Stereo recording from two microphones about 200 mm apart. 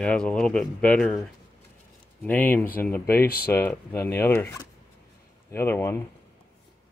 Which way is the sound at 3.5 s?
10° left (ahead or behind).